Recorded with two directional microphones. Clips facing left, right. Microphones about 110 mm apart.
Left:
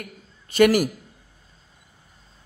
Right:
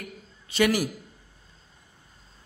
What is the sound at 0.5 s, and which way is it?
Speech, 50° left (ahead or behind).